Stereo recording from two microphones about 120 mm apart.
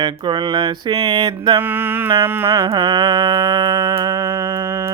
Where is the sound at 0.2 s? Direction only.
40° right (ahead or behind).